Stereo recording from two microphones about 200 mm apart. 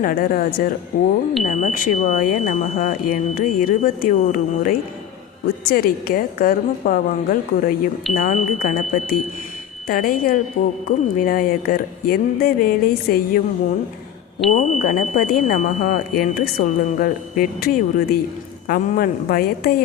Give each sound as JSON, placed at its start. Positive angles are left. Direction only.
{"t": 0.0, "sound": "speech", "side_deg": 45}
{"t": 14.5, "sound": "speech", "side_deg": 40}